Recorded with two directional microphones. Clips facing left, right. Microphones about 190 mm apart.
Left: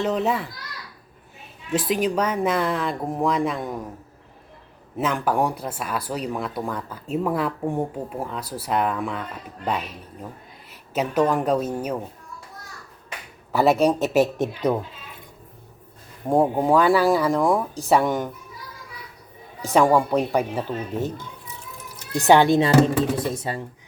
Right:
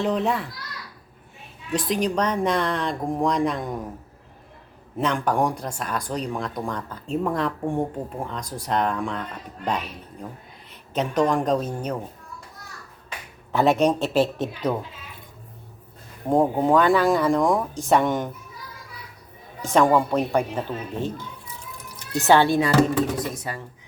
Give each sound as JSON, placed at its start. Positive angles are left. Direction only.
{"t": 0.0, "sound": "speech", "side_deg": 0}
{"t": 1.7, "sound": "speech", "side_deg": 5}
{"t": 4.9, "sound": "speech", "side_deg": 5}
{"t": 10.7, "sound": "speech", "side_deg": 5}
{"t": 13.5, "sound": "speech", "side_deg": 5}
{"t": 16.3, "sound": "speech", "side_deg": 10}
{"t": 19.7, "sound": "speech", "side_deg": 10}
{"t": 22.2, "sound": "speech", "side_deg": 15}